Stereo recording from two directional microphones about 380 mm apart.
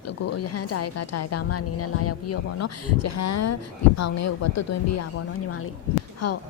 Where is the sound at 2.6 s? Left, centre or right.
Left.